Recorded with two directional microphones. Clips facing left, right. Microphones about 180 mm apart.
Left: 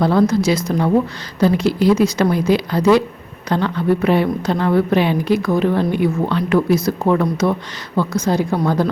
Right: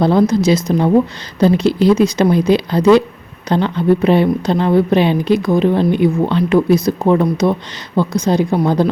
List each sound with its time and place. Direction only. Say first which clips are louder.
0.0 s a woman's voice: right 2 dB; 20° right (ahead or behind)